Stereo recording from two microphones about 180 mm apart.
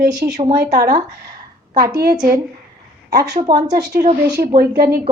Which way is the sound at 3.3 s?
25° right (ahead or behind).